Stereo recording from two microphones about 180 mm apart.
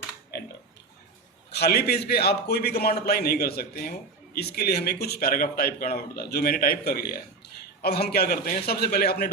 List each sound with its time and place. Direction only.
1.5 s speech: 65° left (ahead or behind)